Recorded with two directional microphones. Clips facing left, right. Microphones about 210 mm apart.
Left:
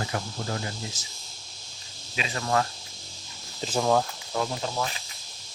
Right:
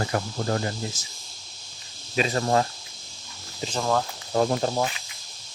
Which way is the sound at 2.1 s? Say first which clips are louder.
Right 5 dB; 40° right (ahead or behind).